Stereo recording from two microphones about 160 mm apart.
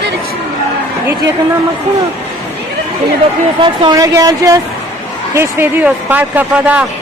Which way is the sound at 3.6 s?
25° right (ahead or behind).